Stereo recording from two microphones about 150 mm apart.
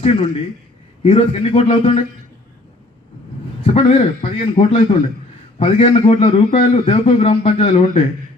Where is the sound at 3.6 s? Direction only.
40° left (ahead or behind).